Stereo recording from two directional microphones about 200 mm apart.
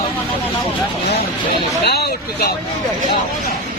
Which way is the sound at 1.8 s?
55° left (ahead or behind).